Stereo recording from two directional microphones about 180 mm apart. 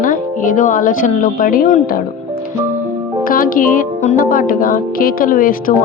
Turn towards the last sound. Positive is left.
turn(degrees=50)  # may be behind; listen again after turning